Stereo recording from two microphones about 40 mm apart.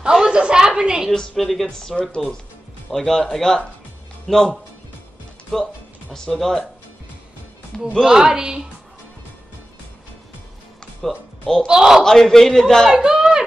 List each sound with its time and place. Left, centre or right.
0.1 s a sound: right
1.4 s speech: centre
1.7 s a man's voice: centre
8.0 s a woman's voice: centre
11.0 s music: centre
11.6 s a woman's voice: centre
12.0 s a man's voice: centre
12.9 s a woman's voice: centre